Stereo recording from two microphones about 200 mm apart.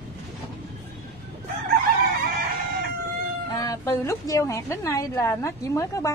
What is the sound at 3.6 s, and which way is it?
A woman's voice, 15° left (ahead or behind).